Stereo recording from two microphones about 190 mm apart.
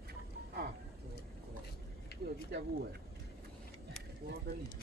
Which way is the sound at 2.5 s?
60° right (ahead or behind).